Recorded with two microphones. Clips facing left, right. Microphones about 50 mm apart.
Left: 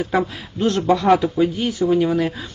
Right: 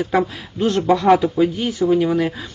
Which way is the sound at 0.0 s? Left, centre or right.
Centre.